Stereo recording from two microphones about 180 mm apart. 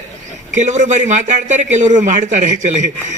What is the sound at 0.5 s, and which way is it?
A man's voice, 40° right (ahead or behind).